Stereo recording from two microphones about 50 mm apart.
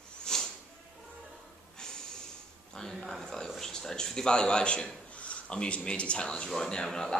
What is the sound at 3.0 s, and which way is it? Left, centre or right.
A man's voice, centre.